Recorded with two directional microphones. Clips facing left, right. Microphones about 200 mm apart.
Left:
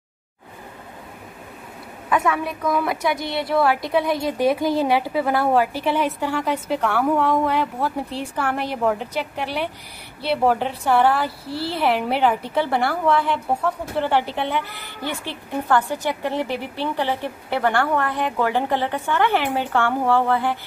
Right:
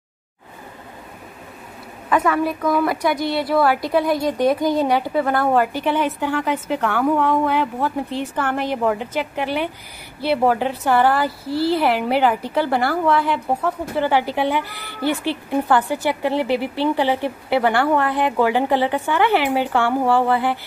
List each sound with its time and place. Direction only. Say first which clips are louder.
2.0 s a woman's voice: right 3 dB; centre (ahead or behind)
14.9 s speech: right 7 dB; 15° left (ahead or behind)
15.2 s a woman's voice: right 5 dB; 10° right (ahead or behind)